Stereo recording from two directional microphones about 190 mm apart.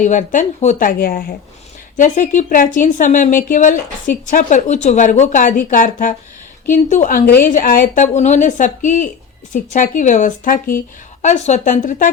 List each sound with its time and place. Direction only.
0.0 s speech: 40° left (ahead or behind)